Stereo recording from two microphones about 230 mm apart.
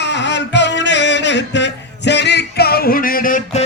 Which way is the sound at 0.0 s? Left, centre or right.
Left.